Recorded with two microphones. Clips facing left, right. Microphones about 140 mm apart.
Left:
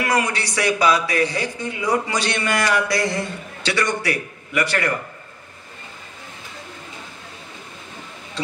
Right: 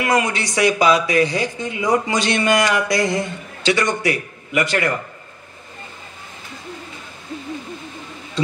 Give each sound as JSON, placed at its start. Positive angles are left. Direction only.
{"t": 0.0, "sound": "a man's voice", "side_deg": -25}